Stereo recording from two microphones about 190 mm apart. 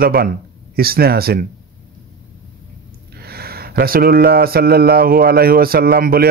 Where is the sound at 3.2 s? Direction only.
55° right (ahead or behind).